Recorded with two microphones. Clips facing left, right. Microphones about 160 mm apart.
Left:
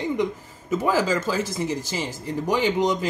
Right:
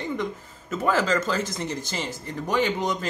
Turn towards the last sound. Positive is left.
turn(degrees=10)  # may be behind; listen again after turning